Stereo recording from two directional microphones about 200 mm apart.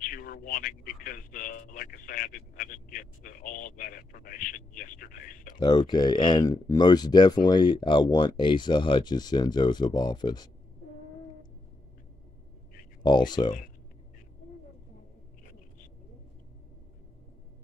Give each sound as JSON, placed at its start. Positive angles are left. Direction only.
{"t": 0.0, "sound": "a sound", "side_deg": 45}
{"t": 5.5, "sound": "speech", "side_deg": 20}
{"t": 13.0, "sound": "speech", "side_deg": 20}